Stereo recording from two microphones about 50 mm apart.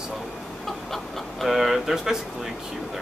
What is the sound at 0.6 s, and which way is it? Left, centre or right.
Speech, centre.